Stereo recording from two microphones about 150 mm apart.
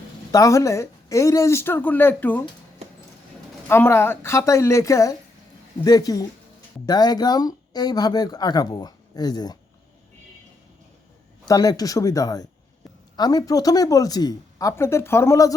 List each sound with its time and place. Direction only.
0.3 s speech: 20° left (ahead or behind)
3.7 s a woman's voice: 15° left (ahead or behind)
11.4 s speech: 25° left (ahead or behind)